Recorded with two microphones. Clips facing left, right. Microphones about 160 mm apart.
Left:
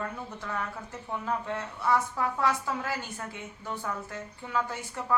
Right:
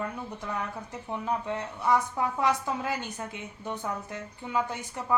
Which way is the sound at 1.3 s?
15° right (ahead or behind).